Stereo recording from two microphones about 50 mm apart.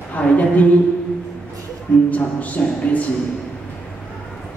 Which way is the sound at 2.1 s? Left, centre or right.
Left.